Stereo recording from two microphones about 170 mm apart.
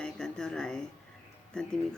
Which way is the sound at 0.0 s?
5° left (ahead or behind).